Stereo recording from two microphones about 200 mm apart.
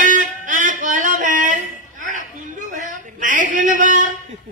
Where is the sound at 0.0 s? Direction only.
40° right (ahead or behind).